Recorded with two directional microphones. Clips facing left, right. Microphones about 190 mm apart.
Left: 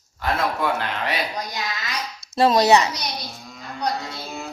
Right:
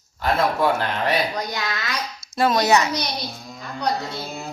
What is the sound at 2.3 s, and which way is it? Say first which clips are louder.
Speech: left 2 dB; 30° left (ahead or behind).